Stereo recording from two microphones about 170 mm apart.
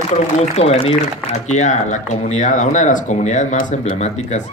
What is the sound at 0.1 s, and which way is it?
A man's voice, 40° left (ahead or behind).